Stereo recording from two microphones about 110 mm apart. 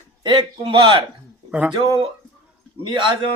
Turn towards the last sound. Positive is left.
turn(degrees=-45)  # may be behind; listen again after turning